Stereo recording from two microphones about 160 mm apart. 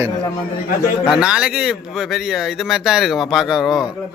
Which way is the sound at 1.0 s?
5° right (ahead or behind).